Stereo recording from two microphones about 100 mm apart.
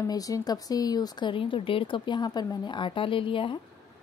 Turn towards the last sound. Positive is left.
turn(degrees=55)  # may be behind; listen again after turning